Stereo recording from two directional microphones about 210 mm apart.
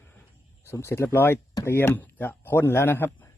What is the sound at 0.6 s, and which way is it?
Speech, 10° left (ahead or behind).